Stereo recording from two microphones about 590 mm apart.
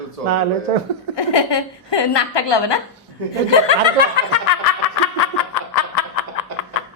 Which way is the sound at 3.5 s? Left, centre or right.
Left.